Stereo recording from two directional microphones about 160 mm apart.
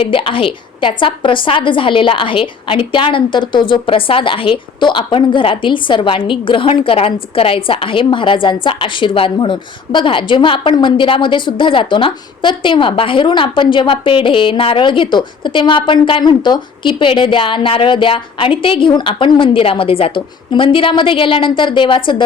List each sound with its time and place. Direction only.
0.0 s a woman's voice: 35° left (ahead or behind)